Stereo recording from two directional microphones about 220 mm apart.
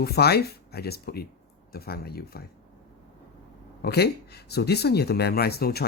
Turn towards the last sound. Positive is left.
turn(degrees=45)  # may be behind; listen again after turning